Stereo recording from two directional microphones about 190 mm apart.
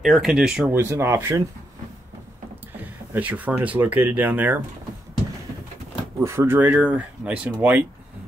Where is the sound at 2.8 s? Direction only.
10° right (ahead or behind).